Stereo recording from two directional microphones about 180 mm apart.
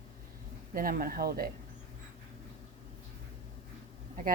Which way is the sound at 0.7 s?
50° right (ahead or behind).